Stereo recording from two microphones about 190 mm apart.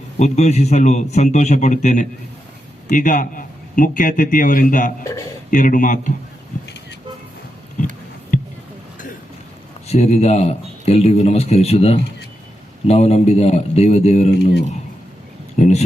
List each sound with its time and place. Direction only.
0.2 s a man's voice: 35° left (ahead or behind)
8.3 s a sound: 40° left (ahead or behind)
9.8 s a man's voice: 35° left (ahead or behind)
15.5 s speech: 40° left (ahead or behind)